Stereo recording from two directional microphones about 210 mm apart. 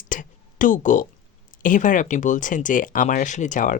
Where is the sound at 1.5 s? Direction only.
40° left (ahead or behind).